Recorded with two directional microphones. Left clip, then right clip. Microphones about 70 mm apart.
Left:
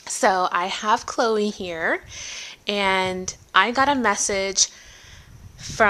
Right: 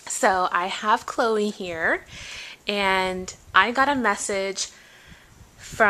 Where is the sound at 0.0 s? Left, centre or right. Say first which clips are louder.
Left 1 dB; left.